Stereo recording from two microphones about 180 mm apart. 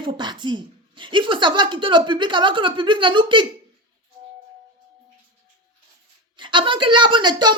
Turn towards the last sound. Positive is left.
turn(degrees=-25)  # may be behind; listen again after turning